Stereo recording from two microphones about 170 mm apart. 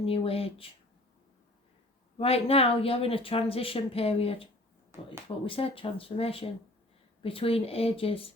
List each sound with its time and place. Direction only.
0.0 s speech: 35° left (ahead or behind)
2.1 s speech: 35° left (ahead or behind)
4.9 s speech: 15° right (ahead or behind)
5.5 s speech: 35° left (ahead or behind)